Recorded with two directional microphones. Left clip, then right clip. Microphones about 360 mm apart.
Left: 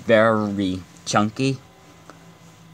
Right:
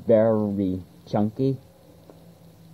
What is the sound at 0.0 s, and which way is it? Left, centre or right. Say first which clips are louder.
Speech: left 3 dB; left.